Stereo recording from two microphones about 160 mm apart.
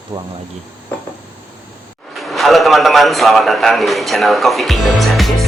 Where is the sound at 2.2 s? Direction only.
Centre (ahead or behind).